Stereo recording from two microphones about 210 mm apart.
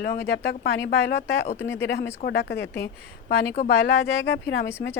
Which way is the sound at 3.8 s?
55° left (ahead or behind).